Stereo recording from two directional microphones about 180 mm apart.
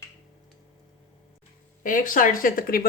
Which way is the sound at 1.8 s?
50° left (ahead or behind).